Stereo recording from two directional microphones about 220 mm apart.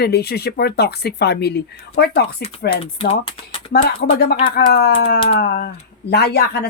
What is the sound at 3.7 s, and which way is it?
Speech, 45° left (ahead or behind).